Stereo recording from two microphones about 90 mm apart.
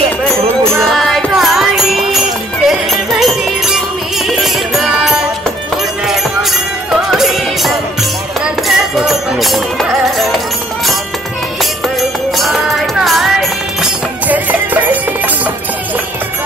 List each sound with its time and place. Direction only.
0.2 s music: 5° left (ahead or behind)
7.0 s music: 5° right (ahead or behind)
12.4 s music: centre (ahead or behind)
14.2 s music: 15° right (ahead or behind)